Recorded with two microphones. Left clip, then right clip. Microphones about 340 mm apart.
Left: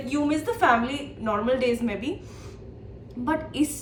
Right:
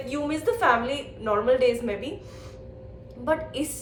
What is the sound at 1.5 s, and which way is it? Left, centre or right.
Speech, right.